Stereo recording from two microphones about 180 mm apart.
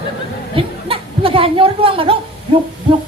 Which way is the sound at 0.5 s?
30° right (ahead or behind).